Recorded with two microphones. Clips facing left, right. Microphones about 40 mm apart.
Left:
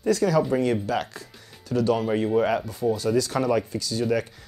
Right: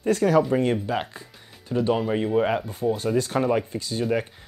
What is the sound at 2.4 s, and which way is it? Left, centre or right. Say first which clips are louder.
Speech: even; right.